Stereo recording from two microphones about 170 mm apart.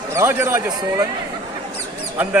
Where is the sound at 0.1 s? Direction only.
15° right (ahead or behind).